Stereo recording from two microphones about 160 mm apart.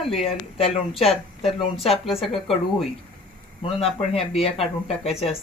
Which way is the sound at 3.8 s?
40° left (ahead or behind).